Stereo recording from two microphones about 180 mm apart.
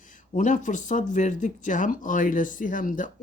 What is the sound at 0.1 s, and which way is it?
Speech, 45° left (ahead or behind).